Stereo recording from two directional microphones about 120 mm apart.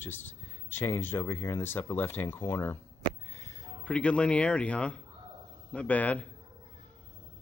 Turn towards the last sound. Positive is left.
turn(degrees=10)  # may be behind; listen again after turning